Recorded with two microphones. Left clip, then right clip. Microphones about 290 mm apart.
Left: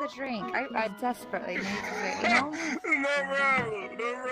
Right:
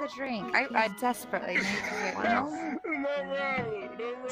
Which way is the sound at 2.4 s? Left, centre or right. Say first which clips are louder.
Left 3 dB; left.